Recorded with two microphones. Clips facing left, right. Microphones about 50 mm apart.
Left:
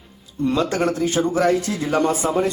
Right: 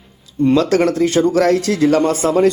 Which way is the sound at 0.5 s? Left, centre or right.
Right.